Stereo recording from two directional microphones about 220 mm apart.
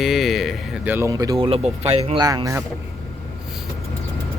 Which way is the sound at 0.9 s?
15° right (ahead or behind).